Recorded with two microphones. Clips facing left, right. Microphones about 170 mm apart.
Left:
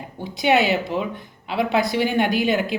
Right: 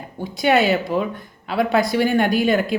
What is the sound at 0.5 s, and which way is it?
Speech, 45° right (ahead or behind).